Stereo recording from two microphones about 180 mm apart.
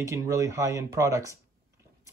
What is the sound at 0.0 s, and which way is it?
Speech, 15° right (ahead or behind).